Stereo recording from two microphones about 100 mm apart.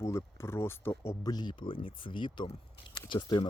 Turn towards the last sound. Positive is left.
turn(degrees=50)  # may be behind; listen again after turning